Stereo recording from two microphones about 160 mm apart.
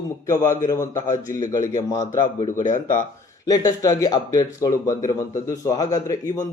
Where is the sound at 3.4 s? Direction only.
25° left (ahead or behind).